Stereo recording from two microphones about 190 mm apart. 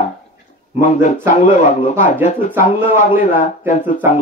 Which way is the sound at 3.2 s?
40° left (ahead or behind).